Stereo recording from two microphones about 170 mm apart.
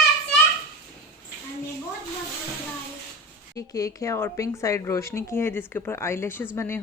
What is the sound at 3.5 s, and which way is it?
Speech, 20° left (ahead or behind).